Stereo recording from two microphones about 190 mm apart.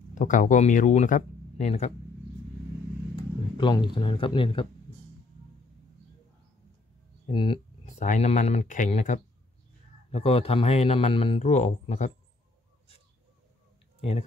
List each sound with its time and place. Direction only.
0.1 s speech: 40° left (ahead or behind)
3.2 s speech: 25° left (ahead or behind)
7.2 s speech: 25° left (ahead or behind)